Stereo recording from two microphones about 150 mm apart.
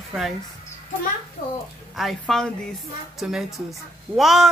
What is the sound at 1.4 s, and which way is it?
Speech, 60° left (ahead or behind).